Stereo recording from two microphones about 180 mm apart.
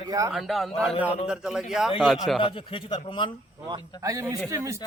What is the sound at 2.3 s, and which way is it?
Speech, 30° left (ahead or behind).